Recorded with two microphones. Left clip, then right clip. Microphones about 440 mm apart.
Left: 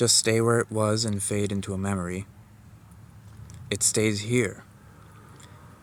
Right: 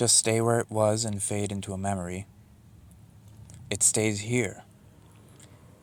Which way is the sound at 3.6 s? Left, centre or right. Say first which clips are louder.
Left 2 dB; right.